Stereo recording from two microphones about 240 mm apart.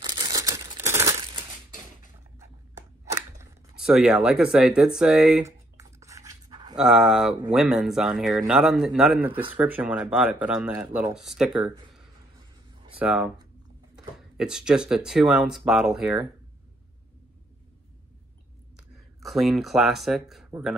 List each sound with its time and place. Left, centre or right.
0.1 s crumpling: centre
2.3 s a sound: centre
3.8 s a sound: centre
6.8 s speech: centre
13.0 s speech: centre
19.1 s speech: centre